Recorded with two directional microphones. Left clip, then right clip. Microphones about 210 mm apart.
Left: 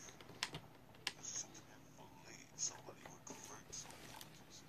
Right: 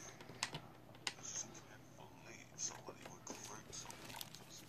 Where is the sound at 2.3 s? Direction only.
10° right (ahead or behind).